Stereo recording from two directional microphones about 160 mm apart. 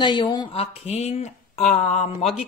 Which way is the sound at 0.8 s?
40° left (ahead or behind).